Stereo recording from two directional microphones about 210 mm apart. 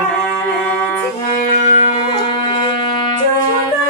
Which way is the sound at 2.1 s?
25° left (ahead or behind).